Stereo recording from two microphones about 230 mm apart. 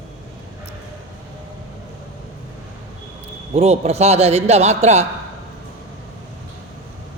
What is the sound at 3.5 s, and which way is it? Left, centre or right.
A man's voice, right.